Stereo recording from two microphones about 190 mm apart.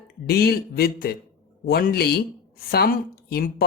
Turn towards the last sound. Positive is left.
turn(degrees=55)  # may be behind; listen again after turning